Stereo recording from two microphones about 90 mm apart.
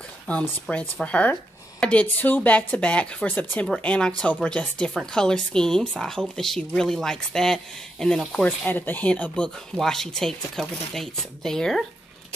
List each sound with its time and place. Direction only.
0.3 s speech: 15° left (ahead or behind)